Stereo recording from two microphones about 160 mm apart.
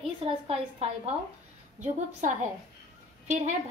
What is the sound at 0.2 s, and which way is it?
Speech, 40° right (ahead or behind).